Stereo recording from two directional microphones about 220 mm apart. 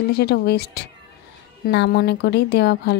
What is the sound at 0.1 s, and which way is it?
A woman's voice, 45° left (ahead or behind).